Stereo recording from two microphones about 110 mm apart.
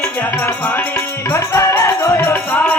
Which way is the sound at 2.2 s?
15° left (ahead or behind).